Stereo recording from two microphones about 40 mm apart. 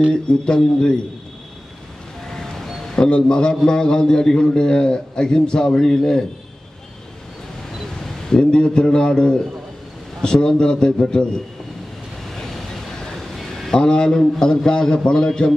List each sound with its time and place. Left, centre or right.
0.1 s a man's voice: left
2.3 s a sound: centre
3.1 s a man's voice: left
8.3 s a man's voice: left
12.4 s vehicle: centre
13.2 s a sound: centre
13.7 s a man's voice: left